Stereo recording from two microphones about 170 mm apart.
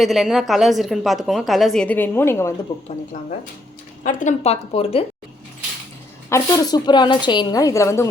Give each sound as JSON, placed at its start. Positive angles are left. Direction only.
{"t": 0.0, "sound": "a woman's voice", "side_deg": 0}
{"t": 4.0, "sound": "a woman's voice", "side_deg": 45}
{"t": 6.3, "sound": "a woman's voice", "side_deg": 20}